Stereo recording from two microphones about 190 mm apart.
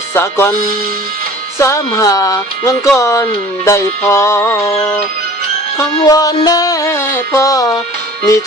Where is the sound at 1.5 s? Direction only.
15° left (ahead or behind).